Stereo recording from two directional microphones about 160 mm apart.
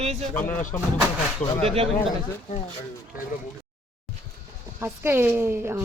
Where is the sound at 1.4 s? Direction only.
45° left (ahead or behind).